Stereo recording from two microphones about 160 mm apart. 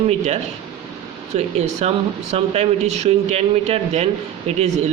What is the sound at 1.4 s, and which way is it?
Speech, 40° right (ahead or behind).